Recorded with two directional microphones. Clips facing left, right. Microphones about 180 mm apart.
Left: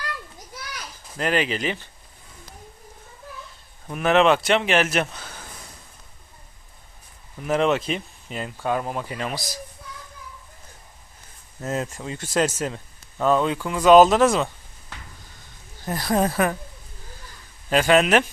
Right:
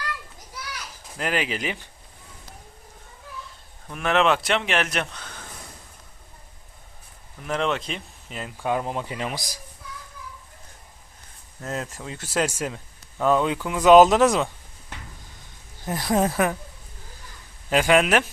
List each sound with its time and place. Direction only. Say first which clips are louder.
1.1 s speech: left 3 dB; 5° right (ahead or behind)
3.8 s a man's voice: left 3 dB; 5° left (ahead or behind)
7.4 s a man's voice: left 5 dB; 5° left (ahead or behind)
8.5 s speech: even; 15° right (ahead or behind)
11.6 s a man's voice: left 4 dB; centre (ahead or behind); by 14.3 s 15° right (ahead or behind)
15.9 s a man's voice: even; 15° right (ahead or behind)
17.7 s speech: left 1 dB; 10° right (ahead or behind)